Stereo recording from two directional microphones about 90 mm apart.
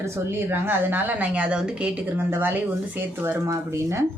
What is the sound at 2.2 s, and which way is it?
A woman's voice, 25° right (ahead or behind).